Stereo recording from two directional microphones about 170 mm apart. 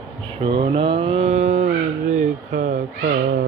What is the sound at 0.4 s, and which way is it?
Mantra, 30° right (ahead or behind).